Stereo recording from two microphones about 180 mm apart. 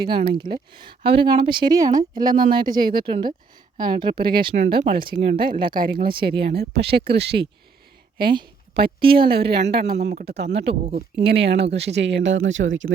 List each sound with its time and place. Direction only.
0.3 s speech: 25° right (ahead or behind)
4.5 s speech: 40° right (ahead or behind)
6.2 s speech: 65° right (ahead or behind)
8.3 s a sound: 25° right (ahead or behind)
9.1 s speech: 30° right (ahead or behind)
9.4 s speech: 65° right (ahead or behind)
10.7 s speech: 40° right (ahead or behind)
11.2 s speech: 70° right (ahead or behind); by 12.9 s 90° right